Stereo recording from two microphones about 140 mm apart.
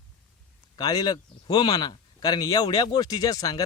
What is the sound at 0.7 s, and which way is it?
Speech, 30° left (ahead or behind).